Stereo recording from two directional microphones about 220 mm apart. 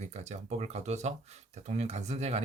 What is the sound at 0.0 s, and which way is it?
Speech, 30° right (ahead or behind).